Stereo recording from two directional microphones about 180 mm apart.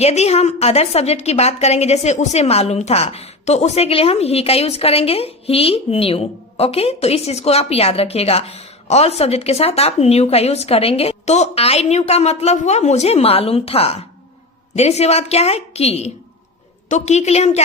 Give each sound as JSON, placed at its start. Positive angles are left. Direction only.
{"t": 0.0, "sound": "a woman's voice", "side_deg": 35}